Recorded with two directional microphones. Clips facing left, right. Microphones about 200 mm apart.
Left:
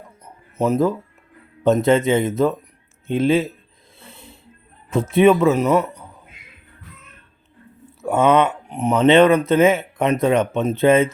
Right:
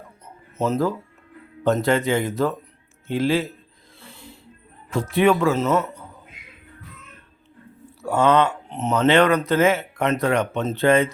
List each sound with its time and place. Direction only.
0.6 s speech: 15° left (ahead or behind)
4.0 s a sound: 20° left (ahead or behind)
4.9 s speech: 20° left (ahead or behind)
8.0 s speech: 20° left (ahead or behind)